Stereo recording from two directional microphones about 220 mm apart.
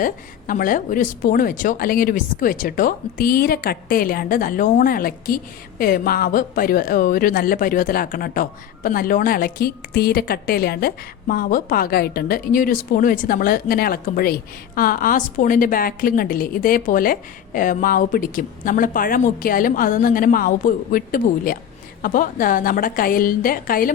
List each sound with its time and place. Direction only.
0.0 s speech: 40° left (ahead or behind)